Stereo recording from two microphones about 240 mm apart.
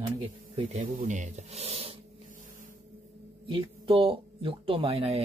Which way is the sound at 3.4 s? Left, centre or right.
Right.